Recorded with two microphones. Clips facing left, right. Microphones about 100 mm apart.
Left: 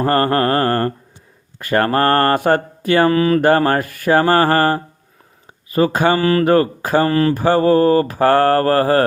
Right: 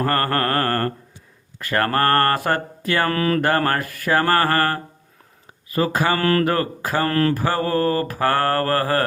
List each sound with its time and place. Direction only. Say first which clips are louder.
0.0 s mantra: left 5 dB; 25° left (ahead or behind)
3.1 s speech: left 6 dB; 5° left (ahead or behind)
3.7 s mantra: left 5 dB; 20° left (ahead or behind)
6.1 s mantra: left 4 dB; 5° left (ahead or behind)
6.4 s mantra: left 7 dB; 25° left (ahead or behind)
7.1 s mantra: left 4 dB; 5° left (ahead or behind)
7.3 s mantra: left 8 dB; 25° left (ahead or behind)